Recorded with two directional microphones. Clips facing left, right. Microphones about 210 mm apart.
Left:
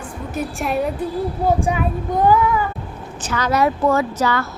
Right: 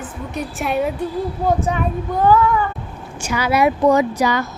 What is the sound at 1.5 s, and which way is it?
Speech, 10° left (ahead or behind).